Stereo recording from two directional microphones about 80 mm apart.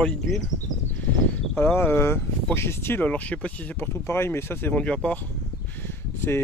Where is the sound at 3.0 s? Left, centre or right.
Centre.